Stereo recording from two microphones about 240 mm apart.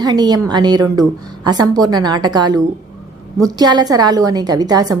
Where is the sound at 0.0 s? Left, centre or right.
Centre.